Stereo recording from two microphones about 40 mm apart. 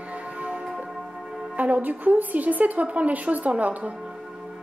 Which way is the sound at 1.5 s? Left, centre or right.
Right.